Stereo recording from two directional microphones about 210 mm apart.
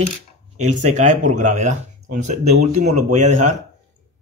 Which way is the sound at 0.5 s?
35° right (ahead or behind).